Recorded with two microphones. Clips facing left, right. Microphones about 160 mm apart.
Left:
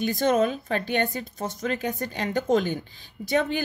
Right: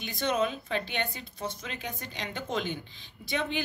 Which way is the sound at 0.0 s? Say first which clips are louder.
Left 7 dB; 45° left (ahead or behind).